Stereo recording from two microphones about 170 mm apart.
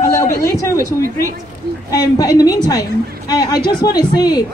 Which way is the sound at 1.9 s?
20° left (ahead or behind).